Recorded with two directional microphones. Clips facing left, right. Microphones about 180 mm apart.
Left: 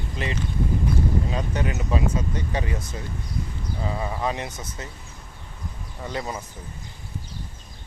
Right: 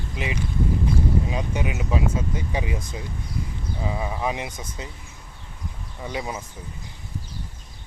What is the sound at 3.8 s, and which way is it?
Speech, 10° right (ahead or behind).